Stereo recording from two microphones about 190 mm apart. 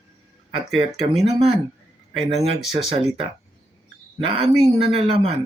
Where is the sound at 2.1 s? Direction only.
30° right (ahead or behind).